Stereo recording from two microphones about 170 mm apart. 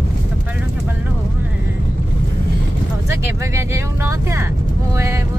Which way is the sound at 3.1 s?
15° right (ahead or behind).